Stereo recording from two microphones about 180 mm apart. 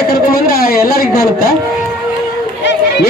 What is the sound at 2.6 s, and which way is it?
Chatter, 75° left (ahead or behind).